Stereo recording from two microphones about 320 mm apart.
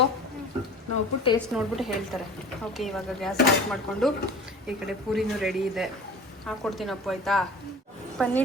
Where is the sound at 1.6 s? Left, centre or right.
Centre.